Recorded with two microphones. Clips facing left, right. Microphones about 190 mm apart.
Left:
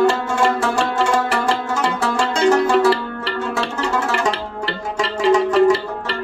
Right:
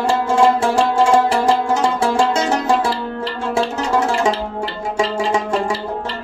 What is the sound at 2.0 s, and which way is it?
Music, 25° right (ahead or behind).